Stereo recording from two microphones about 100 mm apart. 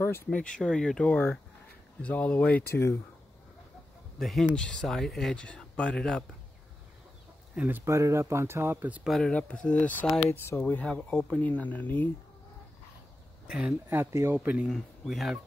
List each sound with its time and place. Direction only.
0.0 s speech: 25° left (ahead or behind)
0.4 s speech: 10° left (ahead or behind); by 3.0 s 25° left (ahead or behind)
4.2 s speech: 5° left (ahead or behind)
7.5 s speech: 20° right (ahead or behind)
7.8 s speech: 30° right (ahead or behind)
9.0 s speech: centre (ahead or behind)
9.3 s speech: 10° left (ahead or behind)
13.5 s speech: 10° right (ahead or behind)
13.8 s speech: 25° right (ahead or behind)
14.7 s speech: 5° right (ahead or behind)